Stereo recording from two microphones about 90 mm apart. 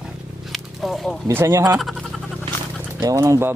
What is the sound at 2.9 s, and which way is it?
Speech, 40° right (ahead or behind).